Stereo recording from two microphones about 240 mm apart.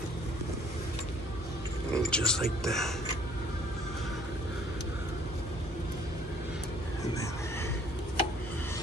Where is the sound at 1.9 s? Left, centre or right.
Centre.